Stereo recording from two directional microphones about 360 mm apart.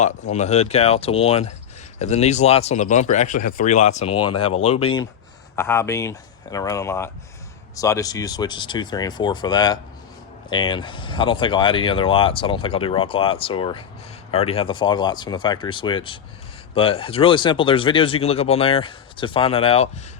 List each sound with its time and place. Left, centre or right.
0.0 s speech: centre